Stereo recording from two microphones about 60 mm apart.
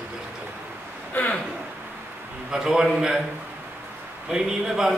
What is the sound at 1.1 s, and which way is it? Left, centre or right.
Speech, left.